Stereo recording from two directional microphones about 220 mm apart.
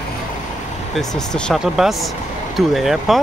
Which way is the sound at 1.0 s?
Centre (ahead or behind).